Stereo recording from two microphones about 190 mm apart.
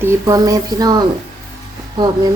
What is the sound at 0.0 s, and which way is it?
Speech, 15° right (ahead or behind).